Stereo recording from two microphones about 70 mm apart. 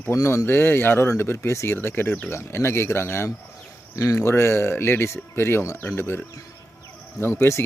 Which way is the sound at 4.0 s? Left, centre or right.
Left.